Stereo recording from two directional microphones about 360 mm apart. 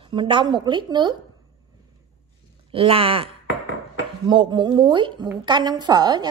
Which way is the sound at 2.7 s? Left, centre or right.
Centre.